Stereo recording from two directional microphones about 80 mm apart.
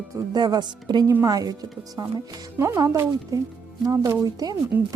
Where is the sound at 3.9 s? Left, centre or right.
Right.